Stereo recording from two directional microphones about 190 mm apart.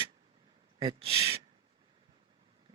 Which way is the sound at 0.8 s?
30° right (ahead or behind).